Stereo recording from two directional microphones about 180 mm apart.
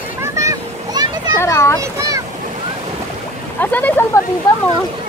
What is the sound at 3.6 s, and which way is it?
Speech, 10° left (ahead or behind).